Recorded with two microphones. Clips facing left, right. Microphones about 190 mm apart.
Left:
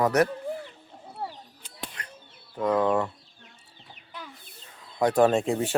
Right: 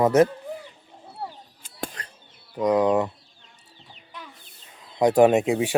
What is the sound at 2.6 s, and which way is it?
Speech, 15° right (ahead or behind).